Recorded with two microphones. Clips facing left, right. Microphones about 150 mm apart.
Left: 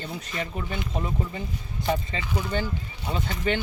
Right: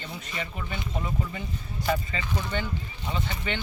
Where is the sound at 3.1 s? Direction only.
40° left (ahead or behind).